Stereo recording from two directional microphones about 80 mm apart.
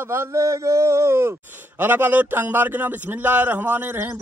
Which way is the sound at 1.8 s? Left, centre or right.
Right.